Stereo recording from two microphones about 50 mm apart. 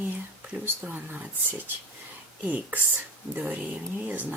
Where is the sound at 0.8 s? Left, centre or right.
Right.